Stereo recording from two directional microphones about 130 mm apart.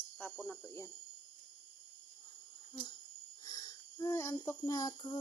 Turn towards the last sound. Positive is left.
turn(degrees=30)  # may be behind; listen again after turning